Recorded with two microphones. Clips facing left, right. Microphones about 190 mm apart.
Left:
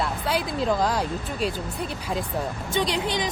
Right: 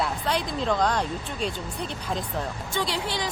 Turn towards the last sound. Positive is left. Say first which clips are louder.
# left 3 dB
turn(degrees=20)  # may be behind; listen again after turning